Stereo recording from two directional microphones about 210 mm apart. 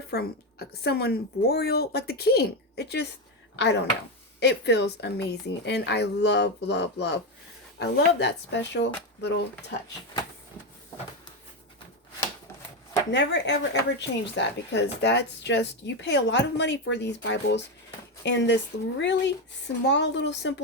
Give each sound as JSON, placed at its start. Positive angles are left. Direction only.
{"t": 0.1, "sound": "a woman's voice", "side_deg": 50}
{"t": 13.1, "sound": "a woman's voice", "side_deg": 55}